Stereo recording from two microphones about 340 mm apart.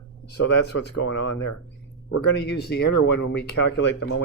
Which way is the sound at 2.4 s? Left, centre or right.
Left.